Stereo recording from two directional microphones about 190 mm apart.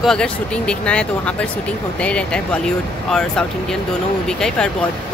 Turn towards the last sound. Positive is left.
turn(degrees=5)  # may be behind; listen again after turning